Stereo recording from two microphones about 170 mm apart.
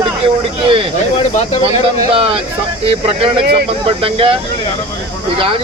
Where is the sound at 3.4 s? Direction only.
65° right (ahead or behind).